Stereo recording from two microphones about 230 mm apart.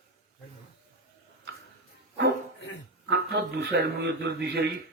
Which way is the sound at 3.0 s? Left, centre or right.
Right.